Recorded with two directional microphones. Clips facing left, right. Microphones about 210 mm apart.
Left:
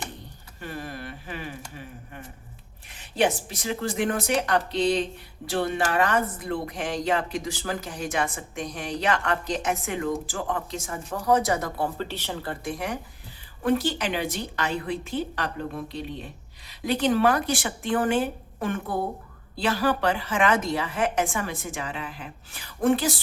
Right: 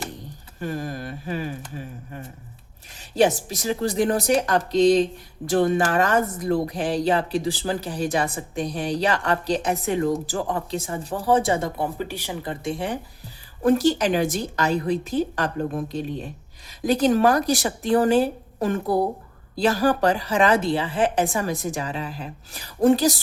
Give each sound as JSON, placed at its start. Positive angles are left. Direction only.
{"t": 0.6, "sound": "a woman's voice", "side_deg": -40}
{"t": 2.9, "sound": "a woman's voice", "side_deg": -40}
{"t": 11.9, "sound": "speech", "side_deg": -15}
{"t": 13.6, "sound": "a woman's voice", "side_deg": -40}